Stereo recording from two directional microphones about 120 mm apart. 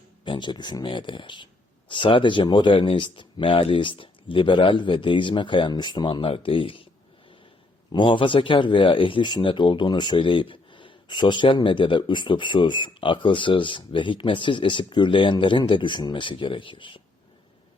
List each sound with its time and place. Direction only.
0.3 s speech: 40° left (ahead or behind)
7.9 s speech: 45° left (ahead or behind)